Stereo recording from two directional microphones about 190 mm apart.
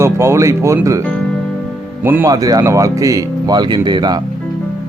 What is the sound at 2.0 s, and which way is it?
Speech, 10° right (ahead or behind).